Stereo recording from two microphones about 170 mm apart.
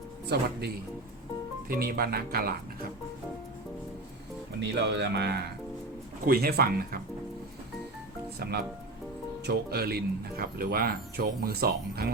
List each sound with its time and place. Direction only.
0.3 s speech: 70° right (ahead or behind)
1.6 s speech: 60° right (ahead or behind)
4.6 s speech: 85° right
6.2 s speech: 65° right (ahead or behind)
8.4 s speech: 70° right (ahead or behind)